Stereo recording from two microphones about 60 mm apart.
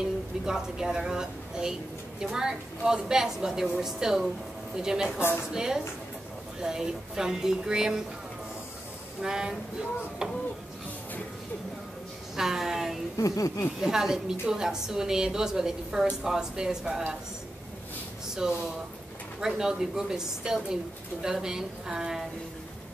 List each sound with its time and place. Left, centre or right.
0.5 s a woman's voice: centre
9.2 s a woman's voice: centre
12.4 s speech: centre
13.2 s speech: left
13.7 s a woman's voice: centre
18.4 s a woman's voice: centre